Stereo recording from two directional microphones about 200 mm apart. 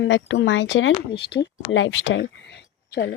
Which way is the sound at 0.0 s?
70° left (ahead or behind).